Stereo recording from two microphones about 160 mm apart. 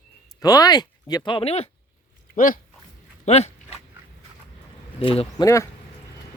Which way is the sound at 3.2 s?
40° left (ahead or behind).